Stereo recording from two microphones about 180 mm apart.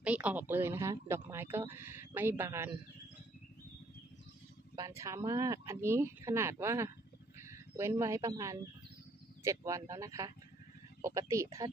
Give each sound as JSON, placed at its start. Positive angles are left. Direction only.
{"t": 0.0, "sound": "speech", "side_deg": -10}
{"t": 4.7, "sound": "speech", "side_deg": -20}